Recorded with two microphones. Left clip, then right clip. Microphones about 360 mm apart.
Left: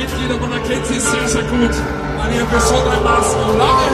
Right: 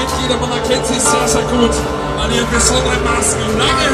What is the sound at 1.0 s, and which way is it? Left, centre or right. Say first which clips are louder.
Speech: right 3 dB; centre.